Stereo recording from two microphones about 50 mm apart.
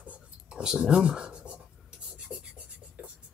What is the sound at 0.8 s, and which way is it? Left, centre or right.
Speech, centre.